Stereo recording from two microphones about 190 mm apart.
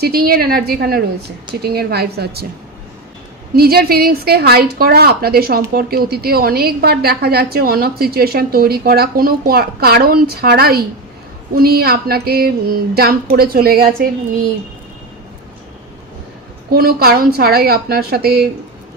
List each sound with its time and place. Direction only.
0.0 s a woman's voice: 55° right (ahead or behind)
3.5 s a woman's voice: 55° right (ahead or behind)
16.7 s a woman's voice: 55° right (ahead or behind)